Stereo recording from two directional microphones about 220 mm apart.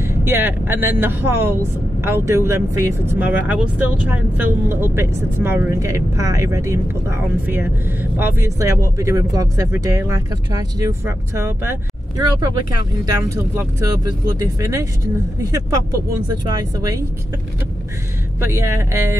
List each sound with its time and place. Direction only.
0.0 s speech: 10° right (ahead or behind)
13.0 s speech: 15° right (ahead or behind)
18.4 s speech: 10° right (ahead or behind)